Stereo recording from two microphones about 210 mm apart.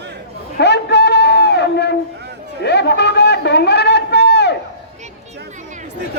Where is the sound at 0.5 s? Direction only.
55° left (ahead or behind).